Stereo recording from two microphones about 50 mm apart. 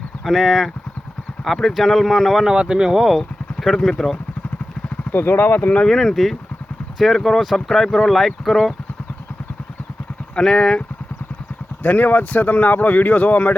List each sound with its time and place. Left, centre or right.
0.3 s speech: centre
2.5 s speech: centre
3.0 s speech: centre
5.1 s speech: left
5.9 s speech: centre
10.3 s speech: centre
11.8 s speech: left